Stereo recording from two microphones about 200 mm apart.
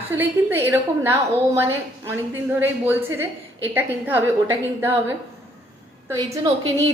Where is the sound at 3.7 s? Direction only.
10° right (ahead or behind).